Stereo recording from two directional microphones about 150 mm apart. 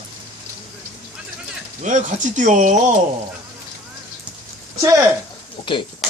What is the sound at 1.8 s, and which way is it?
Speech, 55° right (ahead or behind).